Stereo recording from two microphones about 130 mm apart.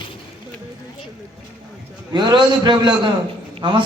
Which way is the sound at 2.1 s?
35° right (ahead or behind).